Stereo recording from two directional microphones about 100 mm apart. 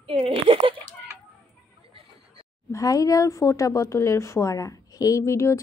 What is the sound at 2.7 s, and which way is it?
A woman's voice, 35° left (ahead or behind).